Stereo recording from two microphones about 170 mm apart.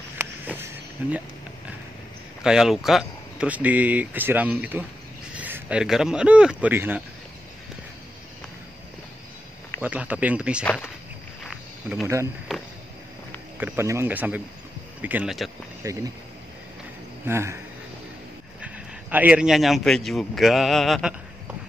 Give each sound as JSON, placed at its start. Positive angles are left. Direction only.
{"t": 0.2, "sound": "a sound", "side_deg": -15}
{"t": 1.0, "sound": "speech", "side_deg": -10}
{"t": 2.4, "sound": "speech", "side_deg": -5}
{"t": 9.8, "sound": "speech", "side_deg": -10}
{"t": 10.6, "sound": "speech", "side_deg": 10}
{"t": 11.4, "sound": "wild animals", "side_deg": 0}
{"t": 12.5, "sound": "a sound", "side_deg": 0}
{"t": 13.6, "sound": "speech", "side_deg": -10}
{"t": 15.8, "sound": "speech", "side_deg": -20}
{"t": 17.3, "sound": "speech", "side_deg": -15}
{"t": 18.6, "sound": "a man's voice", "side_deg": -10}